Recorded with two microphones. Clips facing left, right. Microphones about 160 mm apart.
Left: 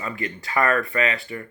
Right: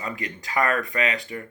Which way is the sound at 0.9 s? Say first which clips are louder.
Left 2 dB; 15° right (ahead or behind).